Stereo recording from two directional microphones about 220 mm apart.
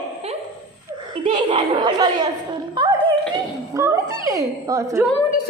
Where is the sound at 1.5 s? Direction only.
20° right (ahead or behind).